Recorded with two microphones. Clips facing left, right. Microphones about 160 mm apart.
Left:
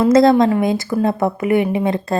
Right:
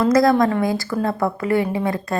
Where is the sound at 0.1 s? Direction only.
25° left (ahead or behind).